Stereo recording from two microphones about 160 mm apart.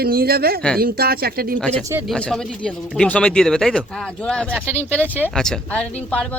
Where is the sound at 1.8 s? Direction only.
15° right (ahead or behind).